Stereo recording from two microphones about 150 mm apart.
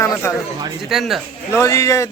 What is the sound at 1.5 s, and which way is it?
Speech, 20° left (ahead or behind).